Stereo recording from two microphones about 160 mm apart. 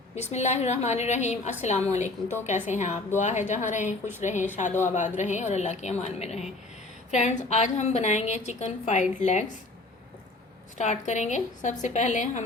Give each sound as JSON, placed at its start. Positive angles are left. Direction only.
{"t": 0.2, "sound": "a woman's voice", "side_deg": 45}
{"t": 10.8, "sound": "a woman's voice", "side_deg": 45}